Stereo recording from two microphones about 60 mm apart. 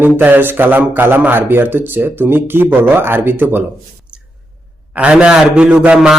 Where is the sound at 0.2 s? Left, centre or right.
Right.